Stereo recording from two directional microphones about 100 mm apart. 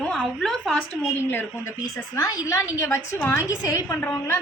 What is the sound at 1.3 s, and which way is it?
Speech, 20° left (ahead or behind).